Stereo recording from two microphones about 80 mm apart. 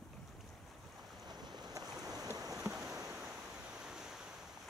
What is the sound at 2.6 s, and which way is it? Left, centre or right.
Boat, centre.